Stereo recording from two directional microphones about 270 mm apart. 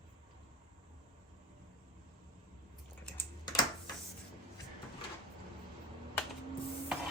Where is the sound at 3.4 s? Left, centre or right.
Centre.